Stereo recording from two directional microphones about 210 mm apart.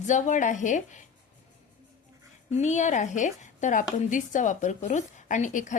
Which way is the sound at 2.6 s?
35° left (ahead or behind).